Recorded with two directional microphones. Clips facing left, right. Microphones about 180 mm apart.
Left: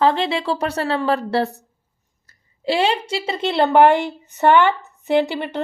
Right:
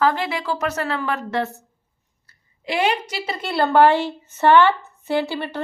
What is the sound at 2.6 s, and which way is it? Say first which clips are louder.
A woman's voice: left 2 dB; 30° left (ahead or behind).